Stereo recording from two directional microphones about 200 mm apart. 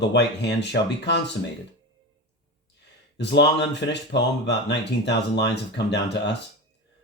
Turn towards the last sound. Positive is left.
turn(degrees=60)  # may be behind; listen again after turning